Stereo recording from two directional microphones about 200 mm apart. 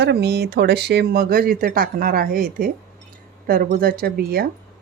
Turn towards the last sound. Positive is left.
turn(degrees=-50)  # may be behind; listen again after turning